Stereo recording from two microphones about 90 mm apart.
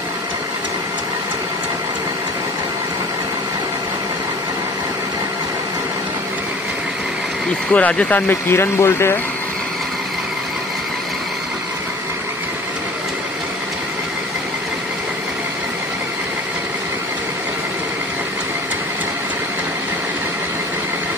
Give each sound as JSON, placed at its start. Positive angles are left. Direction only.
{"t": 7.7, "sound": "speech", "side_deg": 15}
{"t": 8.3, "sound": "speech", "side_deg": 25}